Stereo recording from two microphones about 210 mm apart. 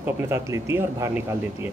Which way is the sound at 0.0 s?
10° right (ahead or behind).